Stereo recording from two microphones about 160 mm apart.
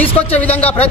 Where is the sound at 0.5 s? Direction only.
40° left (ahead or behind).